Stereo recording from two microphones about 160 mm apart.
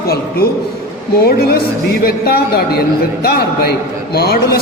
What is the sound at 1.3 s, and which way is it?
A man's voice, 75° left (ahead or behind).